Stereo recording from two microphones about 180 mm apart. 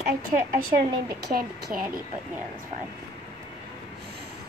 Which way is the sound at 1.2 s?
60° right (ahead or behind).